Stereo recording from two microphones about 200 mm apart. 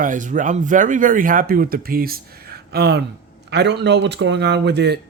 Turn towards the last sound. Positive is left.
turn(degrees=-55)  # may be behind; listen again after turning